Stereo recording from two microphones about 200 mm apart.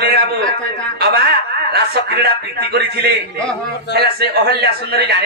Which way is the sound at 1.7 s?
55° right (ahead or behind).